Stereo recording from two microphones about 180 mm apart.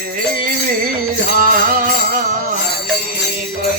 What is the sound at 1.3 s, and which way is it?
Music, 50° right (ahead or behind).